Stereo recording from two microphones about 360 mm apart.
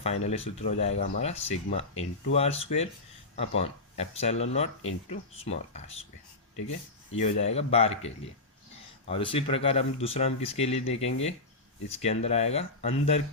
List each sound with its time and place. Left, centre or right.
0.0 s speech: centre
7.2 s speech: centre